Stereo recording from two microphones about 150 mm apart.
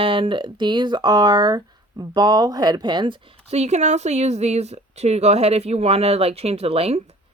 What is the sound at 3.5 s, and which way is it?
Speech, 45° right (ahead or behind).